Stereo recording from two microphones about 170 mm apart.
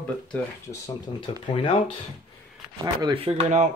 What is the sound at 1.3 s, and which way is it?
Speech, 35° left (ahead or behind).